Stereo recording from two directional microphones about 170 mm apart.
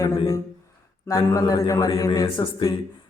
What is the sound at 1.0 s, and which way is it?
Speech, 20° left (ahead or behind).